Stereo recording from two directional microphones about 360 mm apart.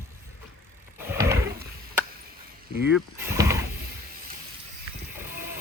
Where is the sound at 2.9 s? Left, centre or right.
Centre.